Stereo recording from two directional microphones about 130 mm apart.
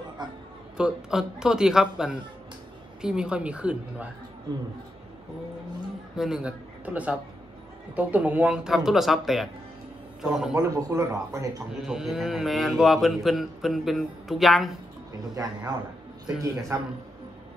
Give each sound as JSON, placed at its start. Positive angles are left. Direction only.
{"t": 0.2, "sound": "a man's voice", "side_deg": -35}
{"t": 0.7, "sound": "a woman's voice", "side_deg": -5}
{"t": 6.1, "sound": "a man's voice", "side_deg": -5}
{"t": 10.6, "sound": "speech", "side_deg": -25}
{"t": 11.7, "sound": "speech", "side_deg": -5}
{"t": 15.3, "sound": "speech", "side_deg": -30}